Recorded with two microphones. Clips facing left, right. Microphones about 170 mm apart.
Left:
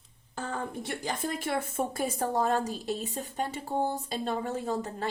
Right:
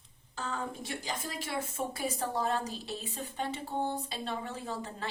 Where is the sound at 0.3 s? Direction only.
55° left (ahead or behind).